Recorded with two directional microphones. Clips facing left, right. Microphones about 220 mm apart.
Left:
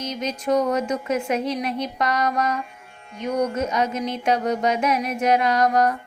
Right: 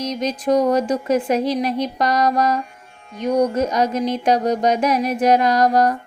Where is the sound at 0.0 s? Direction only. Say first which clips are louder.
Right 5 dB; 35° right (ahead or behind).